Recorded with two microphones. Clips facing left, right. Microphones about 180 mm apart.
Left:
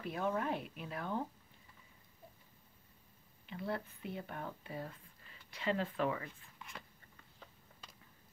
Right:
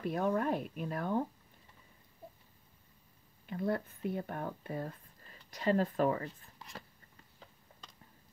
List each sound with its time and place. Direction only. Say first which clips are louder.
0.0 s speech: right 5 dB; 50° right (ahead or behind)
3.4 s speech: right 6 dB; 45° right (ahead or behind)